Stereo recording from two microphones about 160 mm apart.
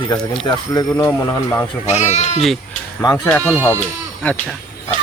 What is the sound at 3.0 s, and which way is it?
Speech, 15° left (ahead or behind).